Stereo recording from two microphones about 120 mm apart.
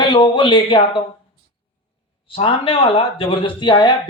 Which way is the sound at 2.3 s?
50° left (ahead or behind).